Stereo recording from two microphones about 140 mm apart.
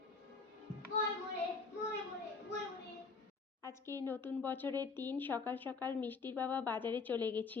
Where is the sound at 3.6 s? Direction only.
20° left (ahead or behind).